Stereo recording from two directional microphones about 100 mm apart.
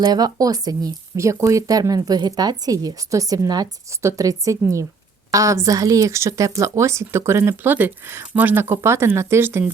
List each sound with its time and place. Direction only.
0.0 s speech: 40° right (ahead or behind); by 9.7 s 25° right (ahead or behind)